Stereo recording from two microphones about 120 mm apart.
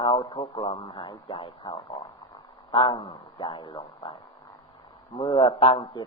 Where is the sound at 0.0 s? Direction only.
40° left (ahead or behind).